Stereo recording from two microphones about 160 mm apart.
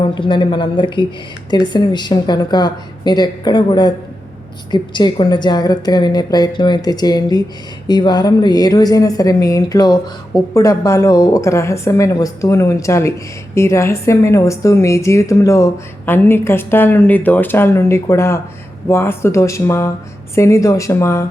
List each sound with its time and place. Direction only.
0.0 s a woman's voice: 30° left (ahead or behind)